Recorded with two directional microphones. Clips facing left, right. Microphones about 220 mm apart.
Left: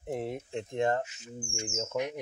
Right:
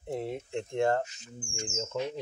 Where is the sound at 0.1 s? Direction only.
20° left (ahead or behind).